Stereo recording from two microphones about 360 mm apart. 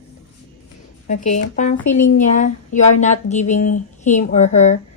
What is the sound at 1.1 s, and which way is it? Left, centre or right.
Speech, centre.